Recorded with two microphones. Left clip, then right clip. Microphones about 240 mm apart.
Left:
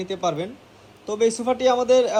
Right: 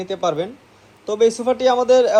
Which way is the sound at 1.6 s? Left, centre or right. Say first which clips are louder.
Right 3 dB; right.